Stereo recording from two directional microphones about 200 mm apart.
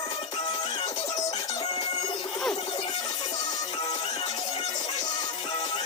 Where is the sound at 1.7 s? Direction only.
30° left (ahead or behind).